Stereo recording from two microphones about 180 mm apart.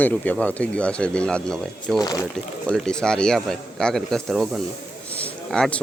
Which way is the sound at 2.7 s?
5° left (ahead or behind).